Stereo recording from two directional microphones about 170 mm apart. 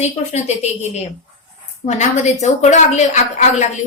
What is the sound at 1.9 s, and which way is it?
A woman's voice, 40° left (ahead or behind).